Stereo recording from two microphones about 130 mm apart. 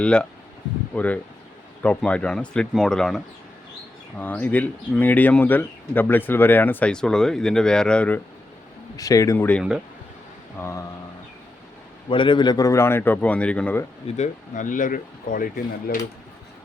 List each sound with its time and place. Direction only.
0.0 s speech: 5° left (ahead or behind)
4.2 s speech: 15° left (ahead or behind)
9.0 s a man's voice: 25° left (ahead or behind)
10.6 s a man's voice: 20° left (ahead or behind)
12.0 s a man's voice: 40° left (ahead or behind); by 13.8 s 10° left (ahead or behind)
14.2 s speech: 75° left (ahead or behind)